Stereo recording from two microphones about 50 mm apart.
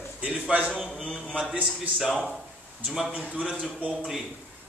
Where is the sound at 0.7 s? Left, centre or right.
Centre.